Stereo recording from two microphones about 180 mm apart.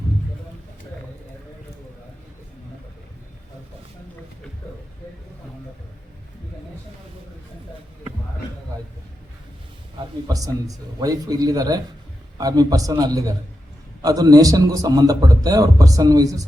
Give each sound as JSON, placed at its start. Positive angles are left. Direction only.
{"t": 10.2, "sound": "a man's voice", "side_deg": -20}